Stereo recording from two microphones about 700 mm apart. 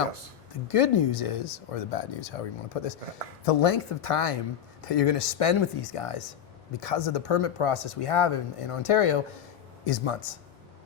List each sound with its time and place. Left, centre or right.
0.7 s speech: left